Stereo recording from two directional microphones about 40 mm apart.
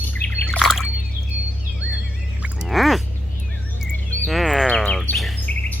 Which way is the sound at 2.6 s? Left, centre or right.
Centre.